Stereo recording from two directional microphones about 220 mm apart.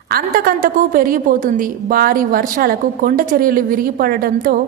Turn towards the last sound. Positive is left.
turn(degrees=-40)  # may be behind; listen again after turning